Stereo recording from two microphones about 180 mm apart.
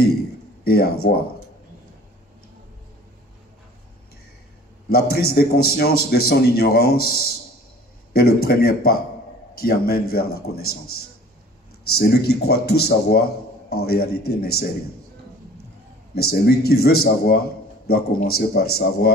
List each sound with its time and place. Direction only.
0.7 s a man's voice: 60° left (ahead or behind)
4.8 s a man's voice: 60° left (ahead or behind)
11.9 s a man's voice: 60° left (ahead or behind)
16.2 s a man's voice: 60° left (ahead or behind)